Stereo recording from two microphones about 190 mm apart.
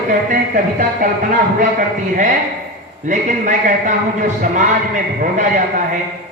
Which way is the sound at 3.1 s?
40° right (ahead or behind).